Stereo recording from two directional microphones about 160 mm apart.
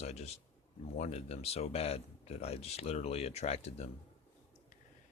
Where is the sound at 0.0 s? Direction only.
40° left (ahead or behind).